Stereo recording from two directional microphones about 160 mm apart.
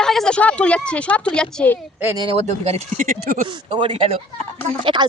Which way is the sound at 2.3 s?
40° right (ahead or behind).